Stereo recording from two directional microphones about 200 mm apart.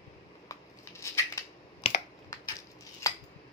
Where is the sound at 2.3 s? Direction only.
15° left (ahead or behind).